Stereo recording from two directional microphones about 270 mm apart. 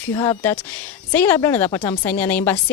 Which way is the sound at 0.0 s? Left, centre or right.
Centre.